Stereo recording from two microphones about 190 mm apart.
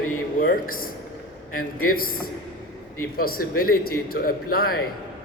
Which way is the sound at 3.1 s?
50° left (ahead or behind).